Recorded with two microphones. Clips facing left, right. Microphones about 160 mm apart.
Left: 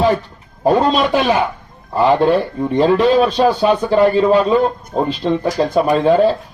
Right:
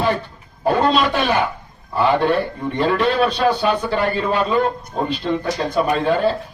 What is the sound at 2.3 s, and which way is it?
Speech, 35° left (ahead or behind).